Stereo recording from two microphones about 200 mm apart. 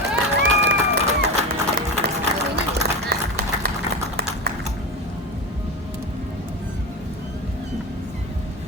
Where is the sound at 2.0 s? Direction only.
55° right (ahead or behind).